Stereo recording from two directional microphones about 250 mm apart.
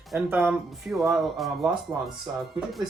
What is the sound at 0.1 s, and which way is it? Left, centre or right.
Speech, centre.